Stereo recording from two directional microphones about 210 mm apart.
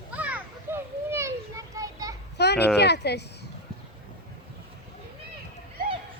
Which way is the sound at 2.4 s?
55° left (ahead or behind).